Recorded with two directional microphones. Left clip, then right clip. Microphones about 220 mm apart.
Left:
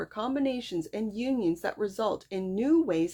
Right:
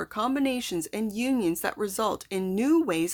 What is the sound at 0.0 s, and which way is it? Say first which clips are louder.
Speech: right 3 dB; 25° right (ahead or behind).